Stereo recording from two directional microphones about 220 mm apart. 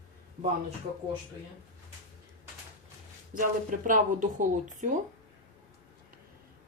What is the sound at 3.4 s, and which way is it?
Speech, 40° right (ahead or behind).